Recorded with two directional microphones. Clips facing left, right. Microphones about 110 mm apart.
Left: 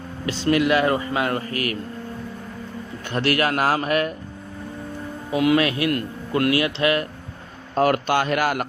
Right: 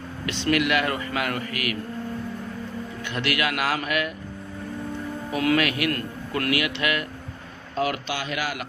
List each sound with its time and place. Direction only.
0.3 s a man's voice: 30° left (ahead or behind)
3.0 s a man's voice: 40° left (ahead or behind)
5.3 s a man's voice: 20° left (ahead or behind)
7.8 s speech: 50° left (ahead or behind)